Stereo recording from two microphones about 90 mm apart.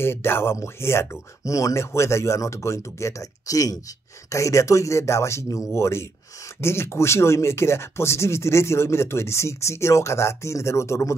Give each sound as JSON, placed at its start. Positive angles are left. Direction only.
{"t": 0.0, "sound": "speech", "side_deg": 25}